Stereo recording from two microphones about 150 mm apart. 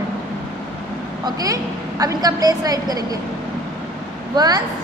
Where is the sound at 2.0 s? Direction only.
25° right (ahead or behind).